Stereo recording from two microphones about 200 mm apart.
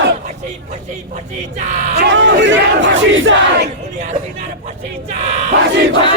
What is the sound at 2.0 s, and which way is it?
Battle cry, 65° right (ahead or behind).